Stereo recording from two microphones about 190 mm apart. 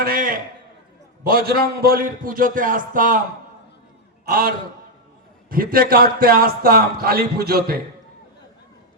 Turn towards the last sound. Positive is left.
turn(degrees=-55)  # may be behind; listen again after turning